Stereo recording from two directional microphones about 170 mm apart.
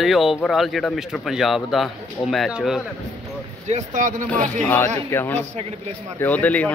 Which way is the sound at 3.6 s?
45° right (ahead or behind).